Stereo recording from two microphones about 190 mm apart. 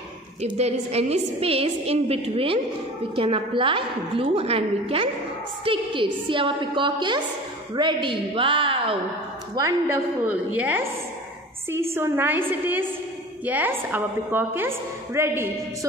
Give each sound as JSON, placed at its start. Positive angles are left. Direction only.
{"t": 0.4, "sound": "a woman's voice", "side_deg": -35}
{"t": 9.6, "sound": "a woman's voice", "side_deg": -15}